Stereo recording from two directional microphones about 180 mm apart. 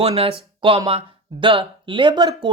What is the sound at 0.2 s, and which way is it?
Speech, 30° right (ahead or behind).